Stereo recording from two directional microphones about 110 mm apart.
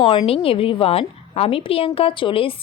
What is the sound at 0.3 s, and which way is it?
A woman's voice, 60° left (ahead or behind).